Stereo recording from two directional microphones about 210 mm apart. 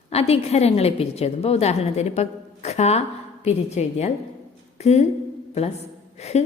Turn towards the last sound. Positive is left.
turn(degrees=30)  # may be behind; listen again after turning